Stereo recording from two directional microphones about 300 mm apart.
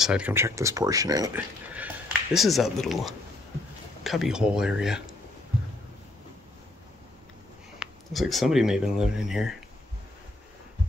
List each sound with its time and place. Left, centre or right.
0.0 s speech: centre
7.8 s speech: centre